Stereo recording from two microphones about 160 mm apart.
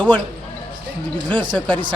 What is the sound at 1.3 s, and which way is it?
Speech, 30° right (ahead or behind).